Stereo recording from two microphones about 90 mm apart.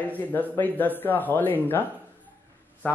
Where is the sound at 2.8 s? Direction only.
15° left (ahead or behind).